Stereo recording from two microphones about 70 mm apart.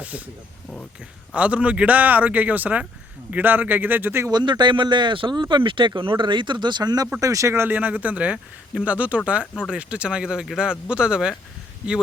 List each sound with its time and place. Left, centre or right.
1.3 s speech: centre
4.3 s speech: right
7.2 s speech: right; by 11.3 s centre